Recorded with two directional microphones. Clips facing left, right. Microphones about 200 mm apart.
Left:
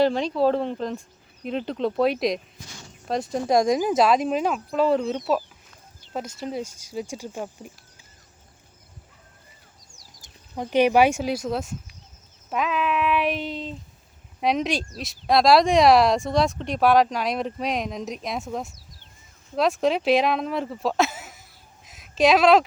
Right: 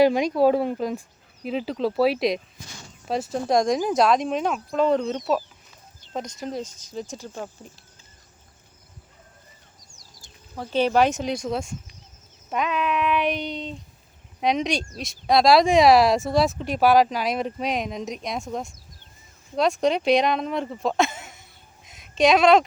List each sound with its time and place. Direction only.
0.0 s speech: 10° right (ahead or behind); by 7.7 s 15° left (ahead or behind)
10.2 s speech: 15° left (ahead or behind); by 21.4 s centre (ahead or behind)
21.8 s a sound: centre (ahead or behind)